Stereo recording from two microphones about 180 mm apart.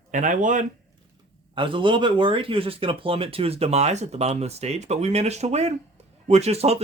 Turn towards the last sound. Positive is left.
turn(degrees=-35)  # may be behind; listen again after turning